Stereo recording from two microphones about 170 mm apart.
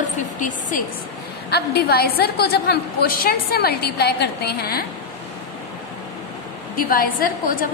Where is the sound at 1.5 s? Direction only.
70° left (ahead or behind).